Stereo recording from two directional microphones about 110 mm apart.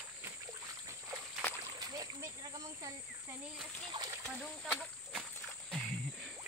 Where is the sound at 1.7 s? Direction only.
35° right (ahead or behind).